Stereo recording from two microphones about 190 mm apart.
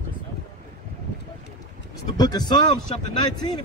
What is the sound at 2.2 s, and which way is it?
Speech, 20° left (ahead or behind).